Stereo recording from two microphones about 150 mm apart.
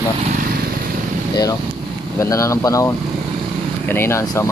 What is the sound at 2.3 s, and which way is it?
Speech, 20° left (ahead or behind).